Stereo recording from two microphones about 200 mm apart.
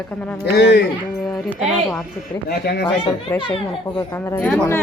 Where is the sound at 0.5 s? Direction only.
60° left (ahead or behind).